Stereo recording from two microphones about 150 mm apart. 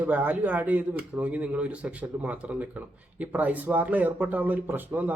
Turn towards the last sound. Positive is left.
turn(degrees=-10)  # may be behind; listen again after turning